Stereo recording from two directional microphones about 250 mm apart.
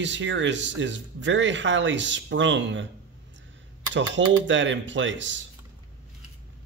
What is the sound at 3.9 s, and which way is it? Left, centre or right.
A man's voice, right.